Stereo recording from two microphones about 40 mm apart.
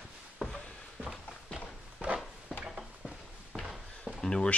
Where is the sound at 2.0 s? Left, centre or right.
Right.